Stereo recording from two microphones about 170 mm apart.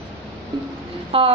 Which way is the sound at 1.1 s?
30° right (ahead or behind).